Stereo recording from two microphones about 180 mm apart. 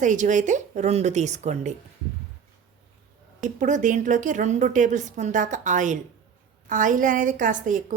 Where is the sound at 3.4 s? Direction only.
45° right (ahead or behind).